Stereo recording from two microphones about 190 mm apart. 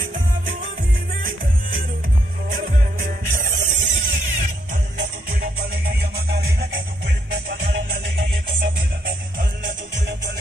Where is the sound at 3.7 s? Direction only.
40° right (ahead or behind).